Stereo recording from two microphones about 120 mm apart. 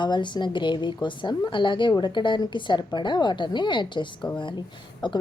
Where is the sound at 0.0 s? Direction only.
40° left (ahead or behind).